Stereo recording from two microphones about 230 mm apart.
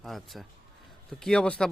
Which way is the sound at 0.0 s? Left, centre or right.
Centre.